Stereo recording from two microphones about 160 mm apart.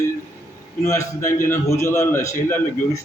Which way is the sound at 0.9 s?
15° left (ahead or behind).